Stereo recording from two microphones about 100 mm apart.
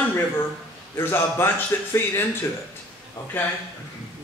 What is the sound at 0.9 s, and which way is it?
Speech, 25° left (ahead or behind).